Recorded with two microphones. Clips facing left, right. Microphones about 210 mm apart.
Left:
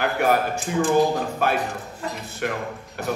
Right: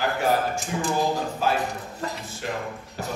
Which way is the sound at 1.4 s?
60° left (ahead or behind).